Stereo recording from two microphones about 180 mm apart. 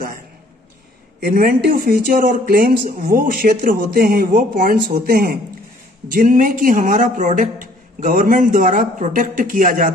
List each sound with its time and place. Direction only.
1.2 s a man's voice: 55° right (ahead or behind)